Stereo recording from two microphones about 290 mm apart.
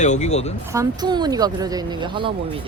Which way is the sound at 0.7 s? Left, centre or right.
Centre.